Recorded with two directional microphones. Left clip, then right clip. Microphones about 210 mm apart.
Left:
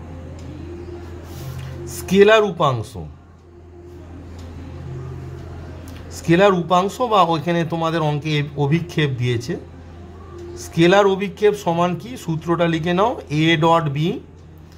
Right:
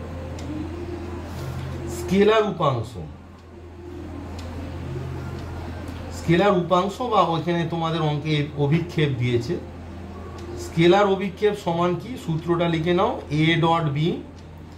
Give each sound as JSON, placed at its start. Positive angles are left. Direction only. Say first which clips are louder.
{"t": 2.0, "sound": "speech", "louder": "left 6 dB", "side_deg": 35}
{"t": 6.2, "sound": "speech", "louder": "left 5 dB", "side_deg": 35}
{"t": 10.8, "sound": "speech", "louder": "left 3 dB", "side_deg": 35}